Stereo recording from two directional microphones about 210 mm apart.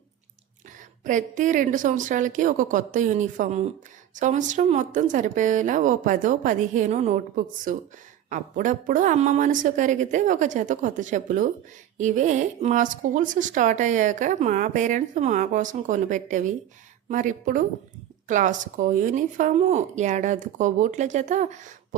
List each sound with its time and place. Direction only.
1.0 s speech: 35° right (ahead or behind)